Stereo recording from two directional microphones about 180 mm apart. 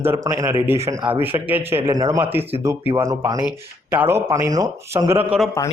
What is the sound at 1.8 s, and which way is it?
A man's voice, 20° right (ahead or behind).